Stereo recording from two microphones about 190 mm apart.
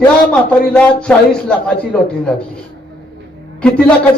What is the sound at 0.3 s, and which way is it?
A man's voice, 5° left (ahead or behind).